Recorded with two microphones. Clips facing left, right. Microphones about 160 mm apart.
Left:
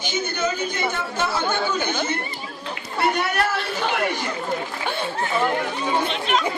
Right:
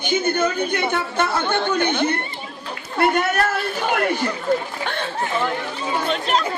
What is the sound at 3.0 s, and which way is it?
Speech, 50° right (ahead or behind).